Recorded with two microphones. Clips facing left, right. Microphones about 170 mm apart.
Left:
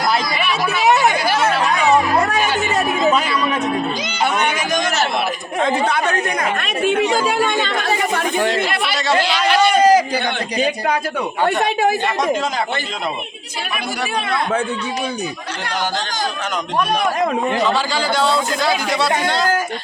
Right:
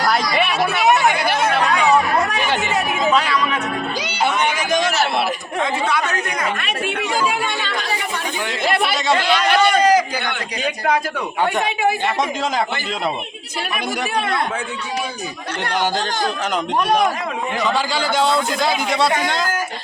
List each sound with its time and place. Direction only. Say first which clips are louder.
0.4 s a man's voice: even; 55° right (ahead or behind)
6.8 s speech: left 5 dB; 40° left (ahead or behind)
9.2 s a man's voice: even; 55° right (ahead or behind)
9.8 s a sound: left 3 dB; 30° left (ahead or behind)
11.4 s speech: left 3 dB; 40° left (ahead or behind)
18.2 s a man's voice: right 1 dB; 20° right (ahead or behind)